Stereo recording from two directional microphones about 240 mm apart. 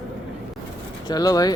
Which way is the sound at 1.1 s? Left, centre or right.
Centre.